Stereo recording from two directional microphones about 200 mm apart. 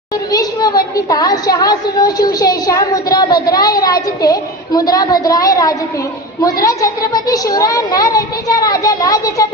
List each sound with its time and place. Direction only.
0.3 s a woman's voice: 20° left (ahead or behind)